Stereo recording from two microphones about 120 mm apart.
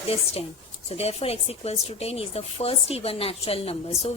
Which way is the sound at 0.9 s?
60° left (ahead or behind).